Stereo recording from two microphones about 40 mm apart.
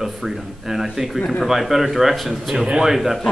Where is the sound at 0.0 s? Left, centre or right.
Centre.